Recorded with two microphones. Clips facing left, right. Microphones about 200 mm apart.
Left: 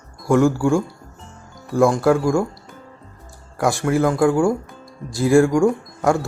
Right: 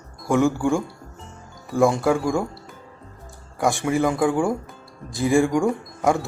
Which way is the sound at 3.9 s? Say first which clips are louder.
Left 3 dB; 15° right (ahead or behind).